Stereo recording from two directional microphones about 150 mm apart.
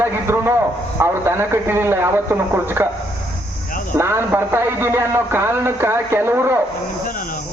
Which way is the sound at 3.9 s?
15° right (ahead or behind).